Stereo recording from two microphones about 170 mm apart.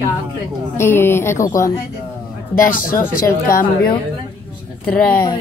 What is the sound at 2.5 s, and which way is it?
Speech, 55° left (ahead or behind).